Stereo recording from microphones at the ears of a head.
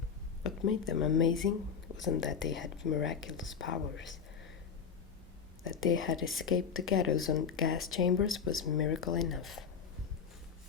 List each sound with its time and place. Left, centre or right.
0.4 s speech: left
5.6 s speech: left